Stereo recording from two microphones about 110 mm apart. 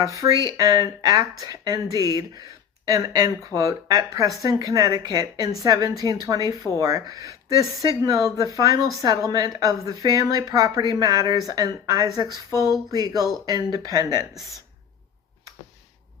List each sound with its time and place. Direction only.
0.0 s a woman's voice: 30° right (ahead or behind)